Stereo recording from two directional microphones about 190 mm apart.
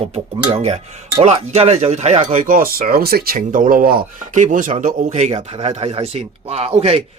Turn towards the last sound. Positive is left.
turn(degrees=-30)  # may be behind; listen again after turning